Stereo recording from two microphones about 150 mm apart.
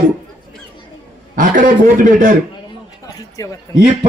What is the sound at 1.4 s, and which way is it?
Speech, 60° right (ahead or behind).